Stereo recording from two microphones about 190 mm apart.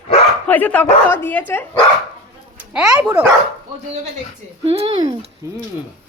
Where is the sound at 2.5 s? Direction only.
5° right (ahead or behind).